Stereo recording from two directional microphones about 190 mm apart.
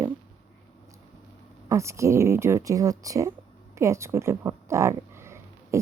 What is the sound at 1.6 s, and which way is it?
Speech, 15° right (ahead or behind).